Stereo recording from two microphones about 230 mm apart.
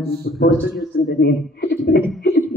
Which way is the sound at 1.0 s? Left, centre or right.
Left.